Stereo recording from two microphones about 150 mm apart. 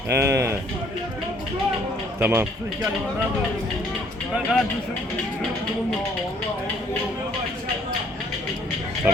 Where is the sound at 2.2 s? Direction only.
15° right (ahead or behind).